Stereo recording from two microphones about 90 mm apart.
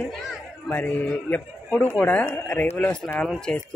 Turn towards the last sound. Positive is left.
turn(degrees=10)  # may be behind; listen again after turning